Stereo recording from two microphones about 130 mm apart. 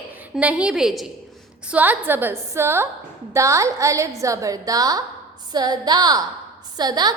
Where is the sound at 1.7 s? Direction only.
15° right (ahead or behind).